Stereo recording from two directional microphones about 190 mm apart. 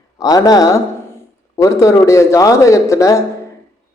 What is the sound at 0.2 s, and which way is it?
Speech, 20° left (ahead or behind).